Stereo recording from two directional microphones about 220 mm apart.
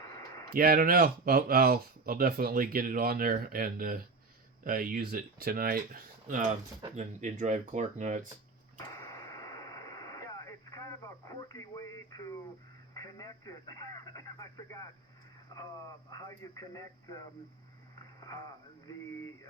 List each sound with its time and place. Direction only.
0.0 s a sound: 15° left (ahead or behind)
0.5 s speech: 40° right (ahead or behind)
8.8 s radio: 15° left (ahead or behind)
12.9 s speech: 15° left (ahead or behind)
16.1 s speech: 15° left (ahead or behind)
18.0 s a sound: 15° left (ahead or behind)